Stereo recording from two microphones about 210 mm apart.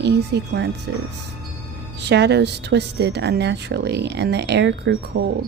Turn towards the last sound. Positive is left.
turn(degrees=-60)  # may be behind; listen again after turning